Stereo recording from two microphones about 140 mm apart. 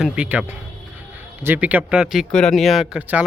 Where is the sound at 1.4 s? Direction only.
10° right (ahead or behind).